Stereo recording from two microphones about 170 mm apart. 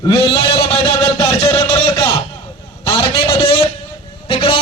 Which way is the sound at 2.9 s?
25° left (ahead or behind).